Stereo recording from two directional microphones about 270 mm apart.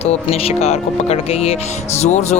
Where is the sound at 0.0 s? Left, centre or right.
Left.